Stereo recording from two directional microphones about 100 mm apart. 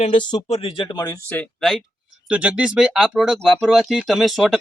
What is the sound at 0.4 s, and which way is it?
Speech, 90° left.